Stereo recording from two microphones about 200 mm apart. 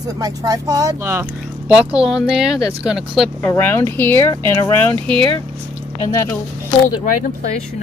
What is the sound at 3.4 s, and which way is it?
Speech, 10° left (ahead or behind).